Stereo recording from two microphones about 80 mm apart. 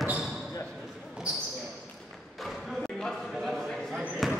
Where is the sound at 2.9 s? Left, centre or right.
Centre.